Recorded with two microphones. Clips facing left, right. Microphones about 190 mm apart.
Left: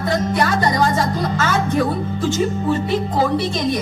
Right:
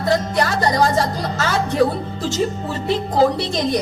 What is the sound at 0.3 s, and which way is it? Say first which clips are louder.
A woman's voice: even; 45° right (ahead or behind).